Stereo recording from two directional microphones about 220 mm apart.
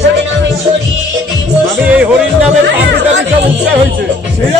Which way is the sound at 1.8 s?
5° right (ahead or behind).